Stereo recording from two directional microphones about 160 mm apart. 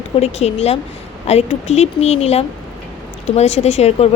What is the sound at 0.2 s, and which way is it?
A woman's voice, 40° left (ahead or behind).